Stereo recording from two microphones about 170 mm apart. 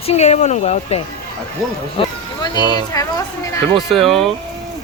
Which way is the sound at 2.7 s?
20° left (ahead or behind).